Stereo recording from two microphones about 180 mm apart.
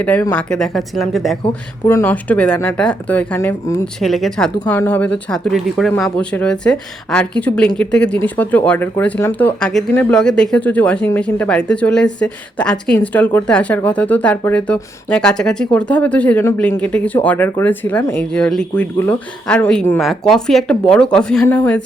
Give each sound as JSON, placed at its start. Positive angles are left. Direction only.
{"t": 0.0, "sound": "a woman's voice", "side_deg": 10}
{"t": 1.9, "sound": "a woman's voice", "side_deg": 10}
{"t": 4.0, "sound": "a woman's voice", "side_deg": 0}